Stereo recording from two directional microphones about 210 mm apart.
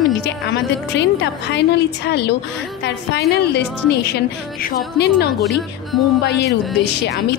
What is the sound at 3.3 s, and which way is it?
A woman's voice, 55° left (ahead or behind).